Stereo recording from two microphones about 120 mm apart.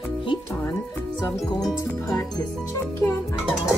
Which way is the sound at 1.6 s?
30° left (ahead or behind).